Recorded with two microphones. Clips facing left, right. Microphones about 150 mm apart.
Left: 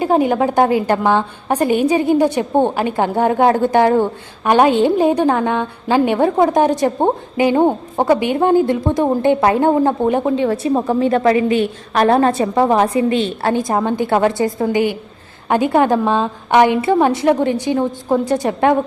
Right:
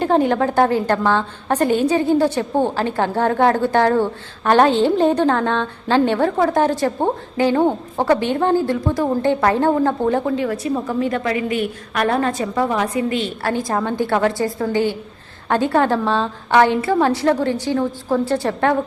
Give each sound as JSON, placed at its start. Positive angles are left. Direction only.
{"t": 0.0, "sound": "a woman's voice", "side_deg": 10}